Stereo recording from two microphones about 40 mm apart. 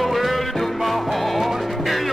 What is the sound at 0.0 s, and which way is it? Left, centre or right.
Music, centre.